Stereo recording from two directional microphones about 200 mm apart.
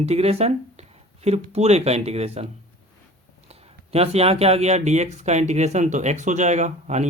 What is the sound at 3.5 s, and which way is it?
Speech, 30° right (ahead or behind).